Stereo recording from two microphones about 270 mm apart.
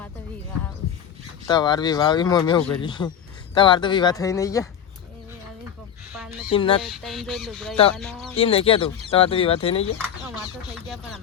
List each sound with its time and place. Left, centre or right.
1.5 s speech: centre
6.5 s speech: centre
6.8 s fowl: centre
8.4 s speech: left